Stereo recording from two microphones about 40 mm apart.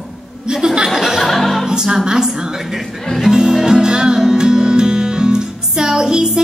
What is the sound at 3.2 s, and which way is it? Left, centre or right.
Music, centre.